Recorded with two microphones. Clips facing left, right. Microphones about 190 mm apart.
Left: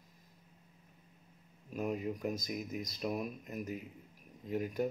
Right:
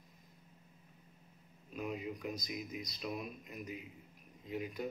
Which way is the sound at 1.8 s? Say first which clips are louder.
Left 5 dB; 45° left (ahead or behind).